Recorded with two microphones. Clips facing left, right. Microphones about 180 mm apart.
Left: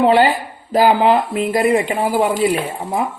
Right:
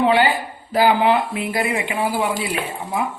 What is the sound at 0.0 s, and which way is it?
Speech, 35° left (ahead or behind).